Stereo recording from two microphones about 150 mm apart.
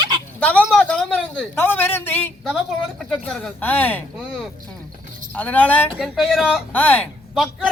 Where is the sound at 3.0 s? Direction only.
Centre (ahead or behind).